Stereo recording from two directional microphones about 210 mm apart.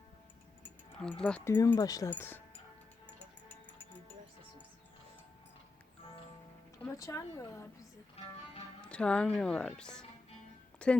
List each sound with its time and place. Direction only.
0.9 s speech: 5° left (ahead or behind)
1.5 s speech: 15° left (ahead or behind)
6.8 s speech: 15° left (ahead or behind)
8.2 s speech: 30° left (ahead or behind)
8.8 s speech: 5° left (ahead or behind)